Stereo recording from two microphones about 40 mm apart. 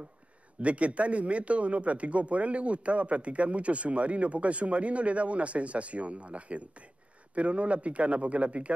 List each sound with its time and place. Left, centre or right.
0.6 s speech: right